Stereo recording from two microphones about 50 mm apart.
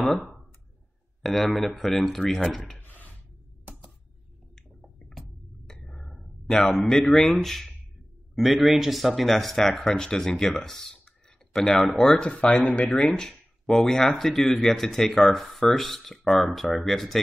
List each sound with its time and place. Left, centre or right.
0.0 s speech: centre
2.8 s a sound: left
4.6 s squish: centre
5.7 s a sound: centre
6.7 s speech: centre; by 13.0 s left
13.0 s speech: centre